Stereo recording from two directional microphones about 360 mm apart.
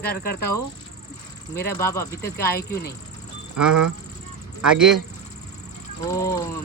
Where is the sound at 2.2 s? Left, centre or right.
Left.